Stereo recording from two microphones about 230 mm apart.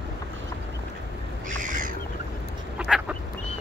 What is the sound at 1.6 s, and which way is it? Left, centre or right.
Bird, right.